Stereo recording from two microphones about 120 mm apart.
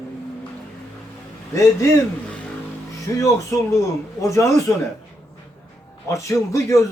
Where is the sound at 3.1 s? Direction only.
25° left (ahead or behind).